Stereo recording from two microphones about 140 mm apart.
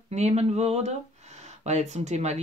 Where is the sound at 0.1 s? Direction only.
50° right (ahead or behind).